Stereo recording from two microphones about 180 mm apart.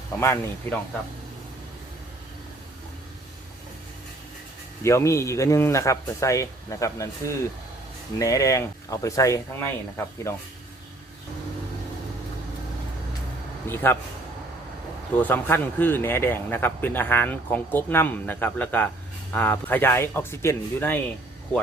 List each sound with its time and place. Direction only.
0.1 s a man's voice: 15° left (ahead or behind)
4.8 s a man's voice: 15° left (ahead or behind)
13.7 s a man's voice: 10° left (ahead or behind)
15.2 s a man's voice: 10° left (ahead or behind)